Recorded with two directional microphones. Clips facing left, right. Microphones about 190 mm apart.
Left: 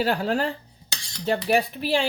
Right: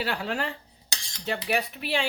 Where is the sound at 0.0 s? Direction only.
40° left (ahead or behind).